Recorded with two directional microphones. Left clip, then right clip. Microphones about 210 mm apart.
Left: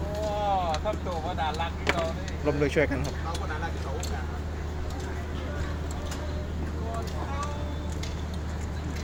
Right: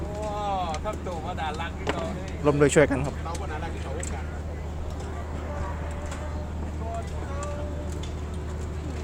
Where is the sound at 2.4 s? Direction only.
35° right (ahead or behind).